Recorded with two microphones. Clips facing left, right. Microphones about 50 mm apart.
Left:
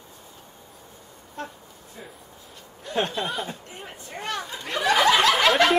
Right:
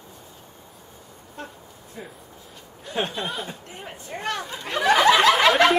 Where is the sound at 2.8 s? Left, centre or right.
Centre.